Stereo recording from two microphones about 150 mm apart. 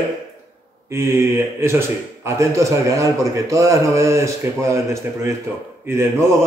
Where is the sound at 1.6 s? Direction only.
15° right (ahead or behind).